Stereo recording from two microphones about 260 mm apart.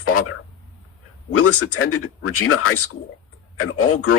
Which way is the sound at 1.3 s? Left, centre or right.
Left.